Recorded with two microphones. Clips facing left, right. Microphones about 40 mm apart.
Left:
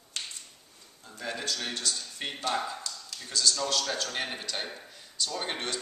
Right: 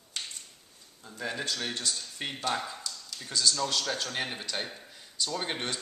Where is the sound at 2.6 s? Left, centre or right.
Centre.